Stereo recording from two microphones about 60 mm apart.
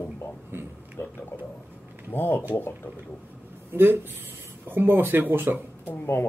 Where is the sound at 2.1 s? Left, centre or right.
Left.